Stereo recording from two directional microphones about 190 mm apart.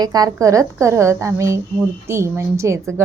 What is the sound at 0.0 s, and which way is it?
A woman's voice, 20° right (ahead or behind).